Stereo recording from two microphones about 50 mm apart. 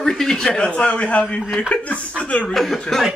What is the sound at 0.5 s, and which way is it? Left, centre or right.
A man's voice, left.